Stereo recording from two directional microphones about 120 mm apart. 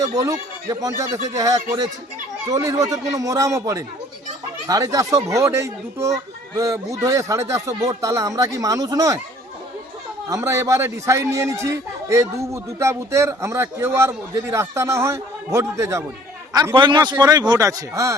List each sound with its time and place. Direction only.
0.0 s a man's voice: 30° right (ahead or behind)
10.2 s a man's voice: 25° right (ahead or behind)
16.7 s a man's voice: 40° right (ahead or behind)